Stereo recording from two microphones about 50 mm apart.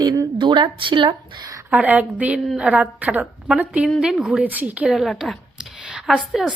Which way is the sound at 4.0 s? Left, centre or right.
Centre.